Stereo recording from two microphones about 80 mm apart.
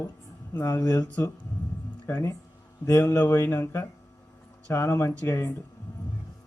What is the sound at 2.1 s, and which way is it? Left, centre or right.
Speech, left.